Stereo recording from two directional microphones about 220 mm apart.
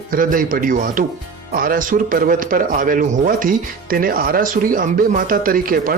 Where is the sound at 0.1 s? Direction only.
40° right (ahead or behind).